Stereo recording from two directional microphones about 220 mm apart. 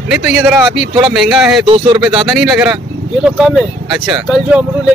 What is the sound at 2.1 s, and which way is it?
Speech, centre (ahead or behind).